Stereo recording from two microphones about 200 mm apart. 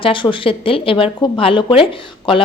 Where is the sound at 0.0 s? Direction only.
25° left (ahead or behind).